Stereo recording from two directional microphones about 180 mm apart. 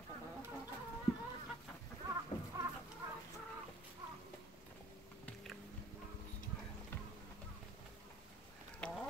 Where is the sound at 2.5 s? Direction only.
15° right (ahead or behind).